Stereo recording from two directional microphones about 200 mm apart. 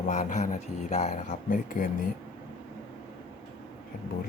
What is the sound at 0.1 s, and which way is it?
Speech, 40° left (ahead or behind).